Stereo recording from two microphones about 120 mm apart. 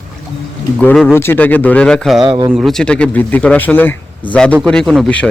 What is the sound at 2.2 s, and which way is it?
Speech, 40° right (ahead or behind).